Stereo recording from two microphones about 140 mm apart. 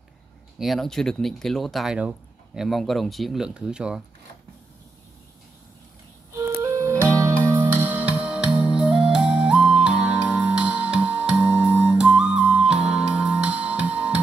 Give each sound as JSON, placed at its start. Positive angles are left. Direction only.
{"t": 0.6, "sound": "speech", "side_deg": 0}
{"t": 6.3, "sound": "music", "side_deg": -20}